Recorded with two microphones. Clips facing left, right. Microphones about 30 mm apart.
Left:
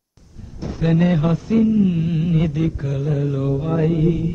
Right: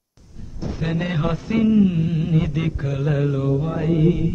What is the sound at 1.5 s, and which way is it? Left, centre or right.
Mantra, right.